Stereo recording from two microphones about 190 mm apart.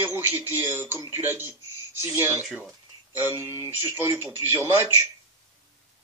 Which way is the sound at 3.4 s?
20° left (ahead or behind).